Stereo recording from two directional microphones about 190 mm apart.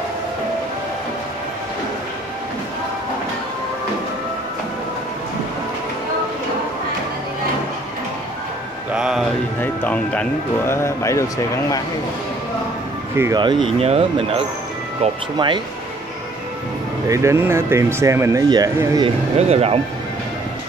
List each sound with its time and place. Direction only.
8.9 s music: 5° right (ahead or behind)
9.6 s speech: 10° left (ahead or behind)
13.1 s speech: 15° right (ahead or behind)
17.1 s speech: 15° right (ahead or behind)
19.3 s speech: 35° right (ahead or behind)